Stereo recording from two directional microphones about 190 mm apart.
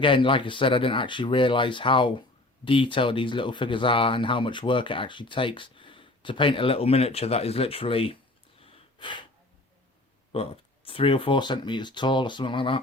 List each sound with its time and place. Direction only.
0.0 s speech: 25° left (ahead or behind)
8.5 s gasp: 25° left (ahead or behind)
10.3 s speech: 30° left (ahead or behind)